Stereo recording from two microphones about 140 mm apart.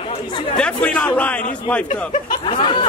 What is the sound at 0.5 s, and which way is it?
Speech, 5° left (ahead or behind).